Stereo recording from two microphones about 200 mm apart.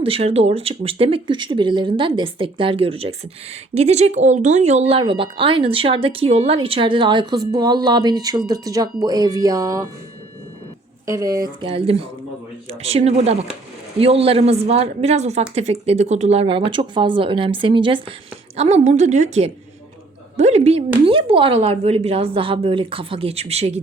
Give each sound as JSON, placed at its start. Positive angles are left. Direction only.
{"t": 0.0, "sound": "a woman's voice", "side_deg": -30}
{"t": 11.0, "sound": "a woman's voice", "side_deg": -15}